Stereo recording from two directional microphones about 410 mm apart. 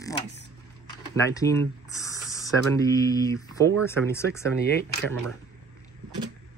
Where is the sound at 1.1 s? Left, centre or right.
Centre.